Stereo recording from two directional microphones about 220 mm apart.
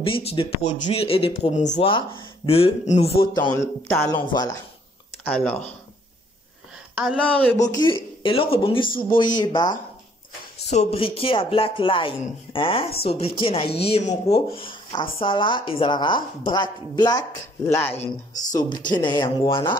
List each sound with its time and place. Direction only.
0.0 s speech: 25° left (ahead or behind)
3.5 s speech: 10° left (ahead or behind)
5.2 s speech: 5° left (ahead or behind)
7.0 s a woman's voice: centre (ahead or behind)
7.7 s speech: 20° left (ahead or behind)